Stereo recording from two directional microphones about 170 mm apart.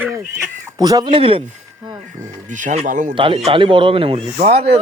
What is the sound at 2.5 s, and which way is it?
Speech, 45° right (ahead or behind).